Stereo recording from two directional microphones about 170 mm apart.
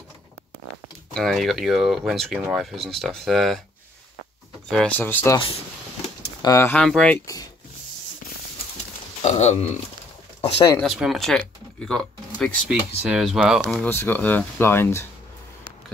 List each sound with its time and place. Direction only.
1.1 s speech: centre (ahead or behind)
4.6 s speech: 5° left (ahead or behind)
6.4 s speech: 15° left (ahead or behind)
9.2 s speech: 40° left (ahead or behind)
10.8 s speech: centre (ahead or behind)
13.8 s speech: 15° left (ahead or behind)